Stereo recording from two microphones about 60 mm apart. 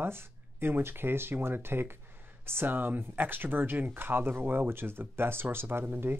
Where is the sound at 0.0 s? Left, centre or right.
Right.